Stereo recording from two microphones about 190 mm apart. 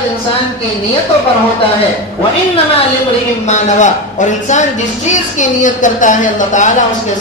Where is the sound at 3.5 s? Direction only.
40° left (ahead or behind).